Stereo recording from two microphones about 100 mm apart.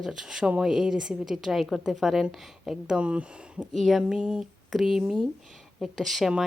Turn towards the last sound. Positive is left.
turn(degrees=-5)  # may be behind; listen again after turning